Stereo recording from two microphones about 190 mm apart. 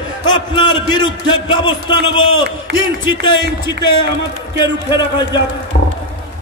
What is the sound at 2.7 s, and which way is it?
Speech, 60° right (ahead or behind).